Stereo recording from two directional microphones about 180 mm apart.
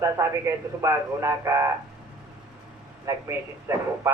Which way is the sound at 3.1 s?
15° right (ahead or behind).